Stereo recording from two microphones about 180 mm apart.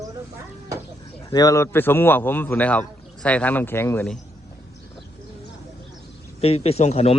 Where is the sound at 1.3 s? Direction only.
20° left (ahead or behind).